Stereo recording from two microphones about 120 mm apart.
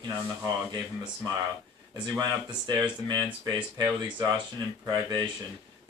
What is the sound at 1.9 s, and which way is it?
Speech, 40° right (ahead or behind).